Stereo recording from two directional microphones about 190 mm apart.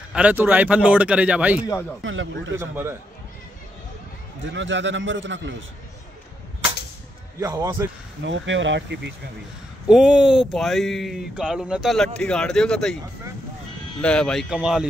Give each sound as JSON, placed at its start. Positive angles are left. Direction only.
{"t": 0.1, "sound": "a man's voice", "side_deg": -10}
{"t": 2.0, "sound": "speech", "side_deg": -90}
{"t": 2.6, "sound": "a man's voice", "side_deg": -10}
{"t": 4.4, "sound": "a man's voice", "side_deg": -75}
{"t": 7.3, "sound": "a man's voice", "side_deg": -15}
{"t": 8.2, "sound": "a man's voice", "side_deg": -80}
{"t": 9.8, "sound": "speech", "side_deg": -5}
{"t": 14.0, "sound": "speech", "side_deg": 5}